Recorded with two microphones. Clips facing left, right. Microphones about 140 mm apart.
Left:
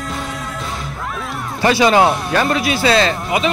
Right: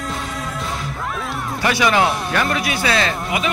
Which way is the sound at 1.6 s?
25° left (ahead or behind).